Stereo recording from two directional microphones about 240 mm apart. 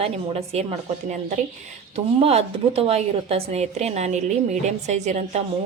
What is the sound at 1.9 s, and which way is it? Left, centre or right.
A woman's voice, right.